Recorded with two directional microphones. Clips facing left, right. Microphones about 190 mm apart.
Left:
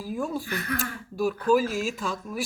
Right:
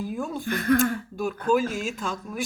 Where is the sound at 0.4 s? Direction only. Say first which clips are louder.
Right 9 dB; 50° right (ahead or behind).